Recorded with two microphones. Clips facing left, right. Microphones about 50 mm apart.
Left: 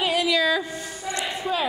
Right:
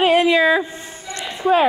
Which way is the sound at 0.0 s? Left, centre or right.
Right.